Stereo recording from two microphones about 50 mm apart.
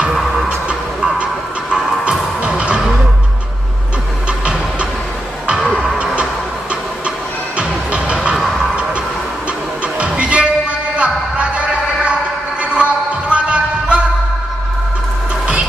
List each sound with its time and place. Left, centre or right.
0.1 s music: centre
1.1 s music: centre
4.3 s a sound: right
5.6 s music: centre
7.5 s music: right
8.4 s music: centre
9.9 s music: right